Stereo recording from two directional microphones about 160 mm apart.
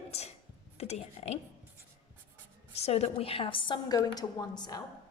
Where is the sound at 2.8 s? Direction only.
40° left (ahead or behind).